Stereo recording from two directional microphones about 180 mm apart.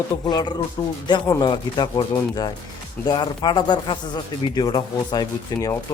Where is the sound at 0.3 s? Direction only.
25° left (ahead or behind).